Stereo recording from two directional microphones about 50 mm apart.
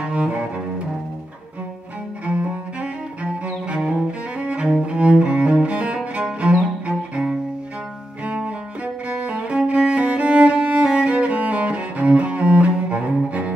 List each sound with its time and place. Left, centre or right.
0.0 s cello: right
2.2 s cello: right
6.9 s cello: centre
8.3 s cello: right
9.1 s music: right